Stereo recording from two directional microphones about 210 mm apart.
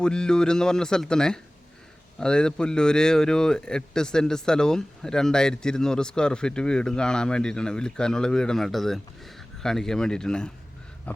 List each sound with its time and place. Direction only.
0.0 s a man's voice: 5° left (ahead or behind)